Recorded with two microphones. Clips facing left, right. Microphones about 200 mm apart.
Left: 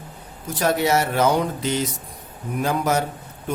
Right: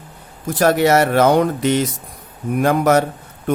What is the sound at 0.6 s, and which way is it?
A man's voice, 70° right (ahead or behind).